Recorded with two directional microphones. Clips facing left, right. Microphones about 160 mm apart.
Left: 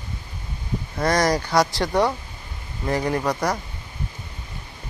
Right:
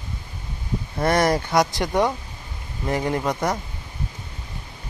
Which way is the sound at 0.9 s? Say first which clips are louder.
Right 1 dB; 25° right (ahead or behind).